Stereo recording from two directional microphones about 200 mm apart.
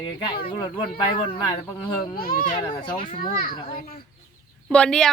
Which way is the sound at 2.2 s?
45° left (ahead or behind).